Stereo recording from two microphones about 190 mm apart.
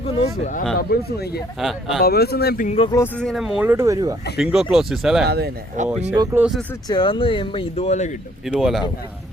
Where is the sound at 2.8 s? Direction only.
15° left (ahead or behind); by 4.1 s 20° right (ahead or behind).